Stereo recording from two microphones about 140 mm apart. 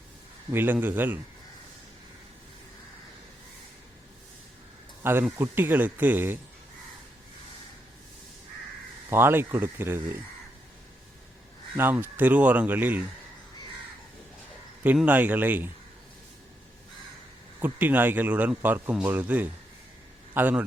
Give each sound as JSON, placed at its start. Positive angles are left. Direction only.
{"t": 0.5, "sound": "a man's voice", "side_deg": -15}
{"t": 5.0, "sound": "a man's voice", "side_deg": -15}
{"t": 9.0, "sound": "a man's voice", "side_deg": -15}
{"t": 11.8, "sound": "a man's voice", "side_deg": -15}
{"t": 15.0, "sound": "a man's voice", "side_deg": -10}
{"t": 17.6, "sound": "a man's voice", "side_deg": -15}